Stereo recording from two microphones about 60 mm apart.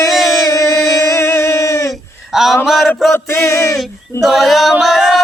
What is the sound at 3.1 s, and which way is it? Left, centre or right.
Chant, left.